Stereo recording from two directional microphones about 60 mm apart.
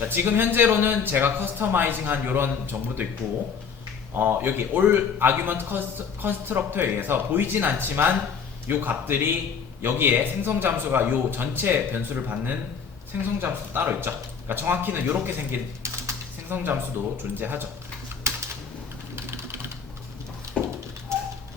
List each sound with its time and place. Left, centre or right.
0.0 s a man's voice: right
4.1 s a man's voice: right
16.5 s a man's voice: right
18.2 s typing: right
20.6 s a sound: right